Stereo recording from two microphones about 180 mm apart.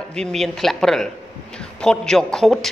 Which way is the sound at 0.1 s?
5° left (ahead or behind).